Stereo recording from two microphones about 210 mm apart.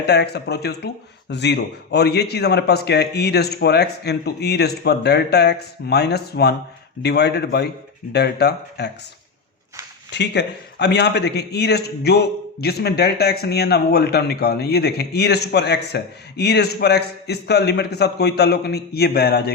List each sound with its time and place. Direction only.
0.0 s a man's voice: 50° left (ahead or behind)
10.1 s a man's voice: 55° left (ahead or behind)